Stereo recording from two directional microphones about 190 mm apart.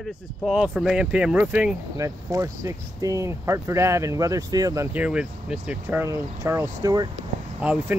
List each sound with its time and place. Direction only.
0.5 s speech: centre (ahead or behind); by 4.8 s 20° right (ahead or behind)
4.9 s speech: 5° right (ahead or behind)
7.6 s speech: 5° right (ahead or behind)